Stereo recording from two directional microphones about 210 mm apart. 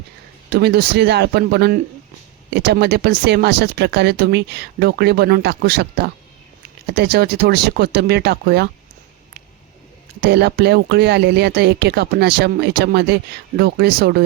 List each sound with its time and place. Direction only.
0.5 s speech: 50° right (ahead or behind)
10.2 s speech: 50° right (ahead or behind)